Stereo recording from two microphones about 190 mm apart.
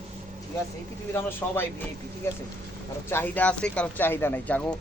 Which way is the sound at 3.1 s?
10° left (ahead or behind).